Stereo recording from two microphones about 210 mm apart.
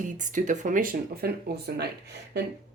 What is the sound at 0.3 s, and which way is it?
Speech, 35° right (ahead or behind).